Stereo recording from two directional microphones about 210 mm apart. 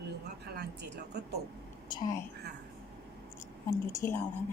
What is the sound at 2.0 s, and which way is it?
Speech, 15° left (ahead or behind).